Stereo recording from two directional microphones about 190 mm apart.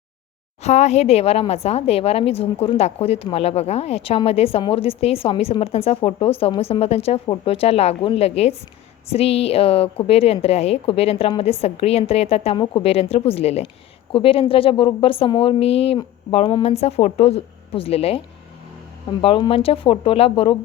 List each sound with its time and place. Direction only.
0.6 s a woman's voice: 35° left (ahead or behind)
19.2 s a woman's voice: 30° left (ahead or behind)